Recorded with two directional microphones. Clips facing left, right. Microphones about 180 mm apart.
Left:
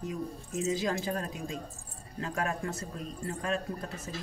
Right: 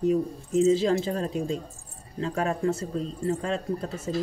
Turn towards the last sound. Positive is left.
turn(degrees=-25)  # may be behind; listen again after turning